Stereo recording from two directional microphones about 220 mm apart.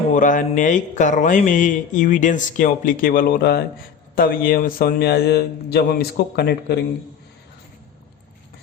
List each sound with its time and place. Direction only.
0.1 s a man's voice: 35° left (ahead or behind)